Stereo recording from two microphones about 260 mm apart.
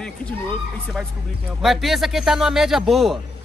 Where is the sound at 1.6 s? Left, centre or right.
Centre.